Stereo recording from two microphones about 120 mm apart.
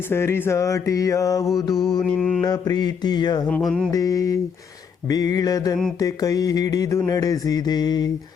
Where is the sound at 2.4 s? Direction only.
35° left (ahead or behind).